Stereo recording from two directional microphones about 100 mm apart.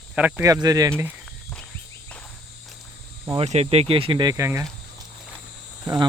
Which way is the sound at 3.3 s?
90° right.